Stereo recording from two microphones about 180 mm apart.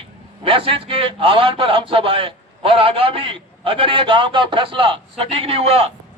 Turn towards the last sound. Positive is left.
turn(degrees=-35)  # may be behind; listen again after turning